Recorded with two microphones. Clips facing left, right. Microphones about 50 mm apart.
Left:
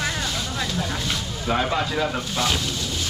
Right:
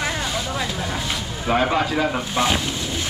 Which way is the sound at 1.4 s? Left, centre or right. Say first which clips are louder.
Right 4 dB; centre.